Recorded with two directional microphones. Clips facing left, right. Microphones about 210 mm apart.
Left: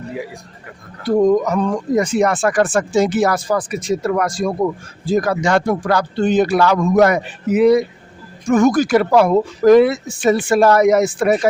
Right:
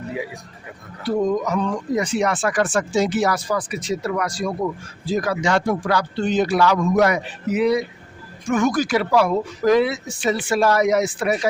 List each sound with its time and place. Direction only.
1.0 s speech: 50° left (ahead or behind)